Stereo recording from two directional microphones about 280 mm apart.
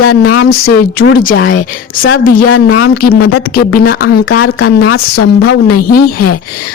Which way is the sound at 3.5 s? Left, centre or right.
Left.